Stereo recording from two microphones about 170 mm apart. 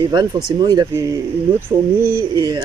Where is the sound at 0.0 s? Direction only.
25° right (ahead or behind).